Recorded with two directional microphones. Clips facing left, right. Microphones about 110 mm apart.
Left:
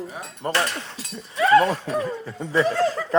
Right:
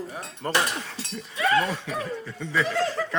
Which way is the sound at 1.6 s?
45° left (ahead or behind).